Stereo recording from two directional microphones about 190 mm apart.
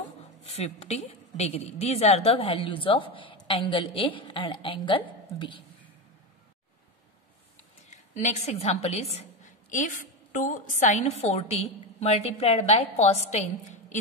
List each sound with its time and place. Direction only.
0.5 s a woman's voice: 35° left (ahead or behind)
7.9 s a woman's voice: 40° left (ahead or behind)